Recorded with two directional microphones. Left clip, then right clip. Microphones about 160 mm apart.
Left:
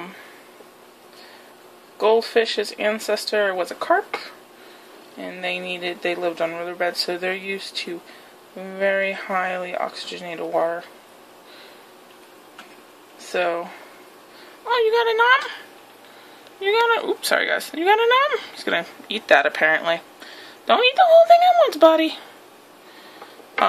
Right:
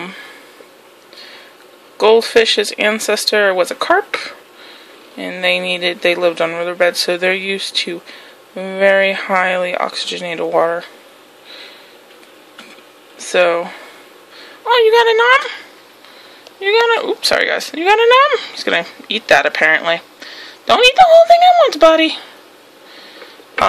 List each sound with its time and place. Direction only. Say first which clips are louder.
2.0 s speech: right 7 dB; 45° right (ahead or behind)
13.2 s speech: right 10 dB; 40° right (ahead or behind); by 22.2 s 25° right (ahead or behind)